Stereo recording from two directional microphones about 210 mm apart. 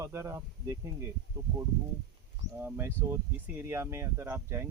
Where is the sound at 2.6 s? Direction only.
10° right (ahead or behind).